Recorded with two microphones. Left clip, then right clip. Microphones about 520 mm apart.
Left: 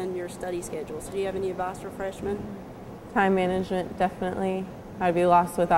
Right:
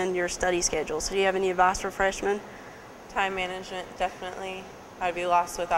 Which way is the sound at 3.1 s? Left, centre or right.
Left.